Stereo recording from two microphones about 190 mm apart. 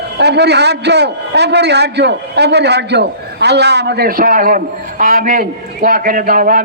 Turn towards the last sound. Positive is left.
turn(degrees=-45)  # may be behind; listen again after turning